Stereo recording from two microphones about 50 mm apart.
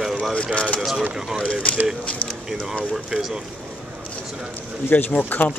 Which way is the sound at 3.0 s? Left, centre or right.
Centre.